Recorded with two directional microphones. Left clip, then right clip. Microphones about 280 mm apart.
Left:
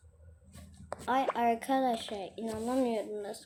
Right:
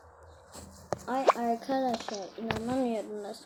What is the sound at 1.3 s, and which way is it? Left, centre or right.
Speech, left.